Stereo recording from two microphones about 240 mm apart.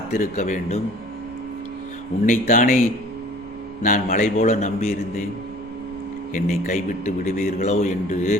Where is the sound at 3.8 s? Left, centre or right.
Left.